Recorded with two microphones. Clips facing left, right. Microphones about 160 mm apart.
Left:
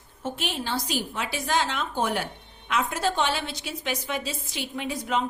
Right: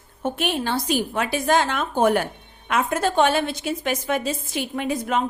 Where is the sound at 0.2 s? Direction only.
55° right (ahead or behind).